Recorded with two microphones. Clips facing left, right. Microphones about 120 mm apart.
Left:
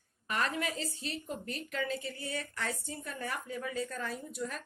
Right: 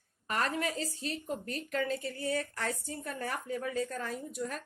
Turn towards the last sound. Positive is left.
turn(degrees=-40)  # may be behind; listen again after turning